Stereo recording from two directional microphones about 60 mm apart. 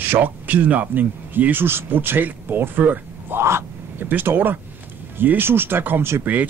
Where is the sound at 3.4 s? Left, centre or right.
Right.